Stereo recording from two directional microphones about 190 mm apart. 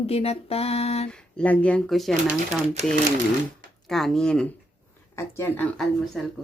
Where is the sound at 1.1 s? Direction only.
5° left (ahead or behind).